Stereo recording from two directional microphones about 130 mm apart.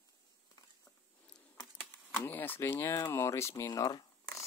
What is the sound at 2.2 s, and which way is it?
Speech, 15° left (ahead or behind).